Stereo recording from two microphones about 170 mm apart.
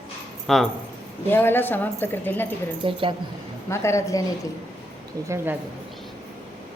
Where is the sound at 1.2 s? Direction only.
15° left (ahead or behind).